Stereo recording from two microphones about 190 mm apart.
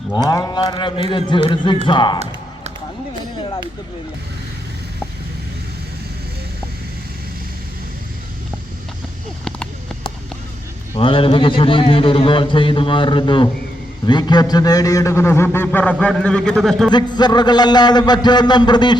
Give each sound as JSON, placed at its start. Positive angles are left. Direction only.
{"t": 0.3, "sound": "a man's voice", "side_deg": 20}
{"t": 10.9, "sound": "a man's voice", "side_deg": 30}
{"t": 16.9, "sound": "a man's voice", "side_deg": 20}